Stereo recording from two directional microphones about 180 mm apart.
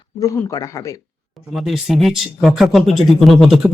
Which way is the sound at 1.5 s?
Centre (ahead or behind).